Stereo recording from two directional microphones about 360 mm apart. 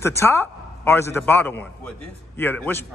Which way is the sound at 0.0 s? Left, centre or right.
Centre.